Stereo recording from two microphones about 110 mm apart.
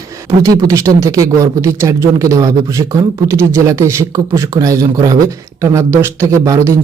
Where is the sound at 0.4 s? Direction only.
30° right (ahead or behind).